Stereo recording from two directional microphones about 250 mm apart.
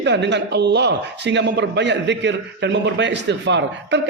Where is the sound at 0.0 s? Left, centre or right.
Right.